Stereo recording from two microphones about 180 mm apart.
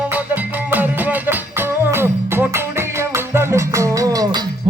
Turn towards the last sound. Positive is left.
turn(degrees=-20)  # may be behind; listen again after turning